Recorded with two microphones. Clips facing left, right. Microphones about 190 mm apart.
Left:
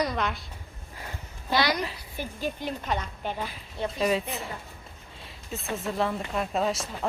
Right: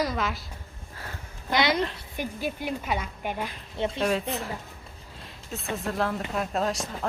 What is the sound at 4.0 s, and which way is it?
Speech, centre (ahead or behind).